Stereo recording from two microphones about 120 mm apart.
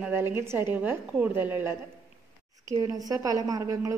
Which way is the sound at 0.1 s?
20° right (ahead or behind).